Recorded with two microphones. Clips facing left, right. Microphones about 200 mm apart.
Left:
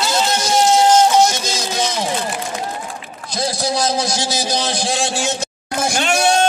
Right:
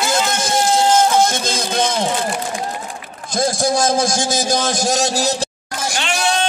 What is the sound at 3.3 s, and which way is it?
A man's voice, 50° right (ahead or behind).